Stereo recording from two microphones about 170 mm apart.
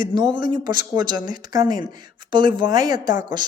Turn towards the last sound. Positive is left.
turn(degrees=-25)  # may be behind; listen again after turning